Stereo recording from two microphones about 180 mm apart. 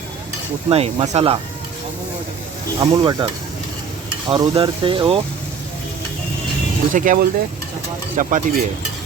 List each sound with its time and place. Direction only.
0.7 s speech: 35° right (ahead or behind)
2.8 s speech: 25° right (ahead or behind)
4.3 s speech: 30° right (ahead or behind)
6.9 s speech: 50° right (ahead or behind)